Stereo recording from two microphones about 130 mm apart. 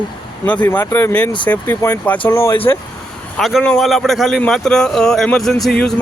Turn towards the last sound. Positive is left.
turn(degrees=5)  # may be behind; listen again after turning